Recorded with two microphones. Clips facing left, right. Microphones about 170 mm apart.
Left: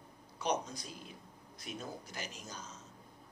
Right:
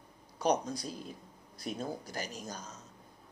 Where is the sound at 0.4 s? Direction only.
35° right (ahead or behind).